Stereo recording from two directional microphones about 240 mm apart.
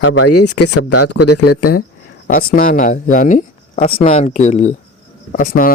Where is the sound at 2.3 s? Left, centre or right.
Left.